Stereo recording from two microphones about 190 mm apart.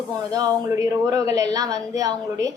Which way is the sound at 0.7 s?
15° right (ahead or behind).